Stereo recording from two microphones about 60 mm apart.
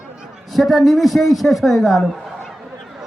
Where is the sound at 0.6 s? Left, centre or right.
Centre.